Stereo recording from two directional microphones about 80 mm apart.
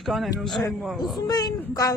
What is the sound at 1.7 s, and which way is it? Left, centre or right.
Speech, left.